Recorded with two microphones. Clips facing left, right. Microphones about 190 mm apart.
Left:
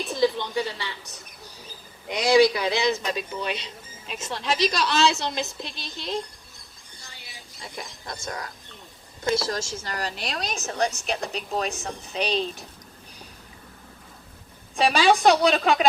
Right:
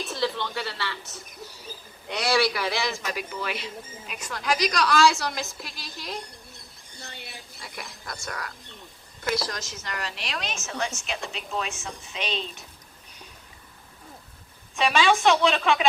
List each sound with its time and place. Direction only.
0.1 s a woman's voice: 15° left (ahead or behind)
7.0 s a sound: 60° right (ahead or behind)
7.6 s a man's voice: 25° left (ahead or behind)
14.8 s a woman's voice: 35° left (ahead or behind)